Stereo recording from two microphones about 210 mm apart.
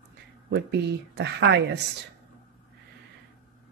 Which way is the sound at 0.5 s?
55° right (ahead or behind).